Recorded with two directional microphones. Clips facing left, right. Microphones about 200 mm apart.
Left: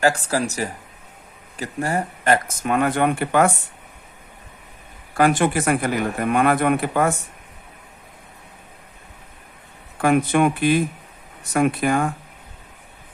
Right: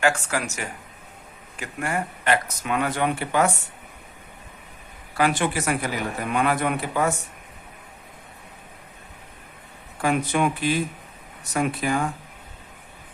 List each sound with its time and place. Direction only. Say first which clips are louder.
0.0 s speech: left 4 dB; 35° left (ahead or behind); by 3.5 s 55° left (ahead or behind)
5.1 s speech: left 5 dB; 50° left (ahead or behind)
10.0 s speech: left 5 dB; 55° left (ahead or behind)